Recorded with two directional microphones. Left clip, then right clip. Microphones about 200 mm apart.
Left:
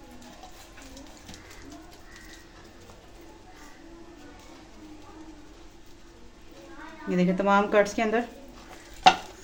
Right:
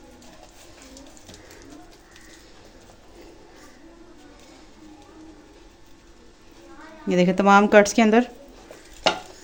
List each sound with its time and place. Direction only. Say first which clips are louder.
7.1 s speech: right 7 dB; 55° right (ahead or behind)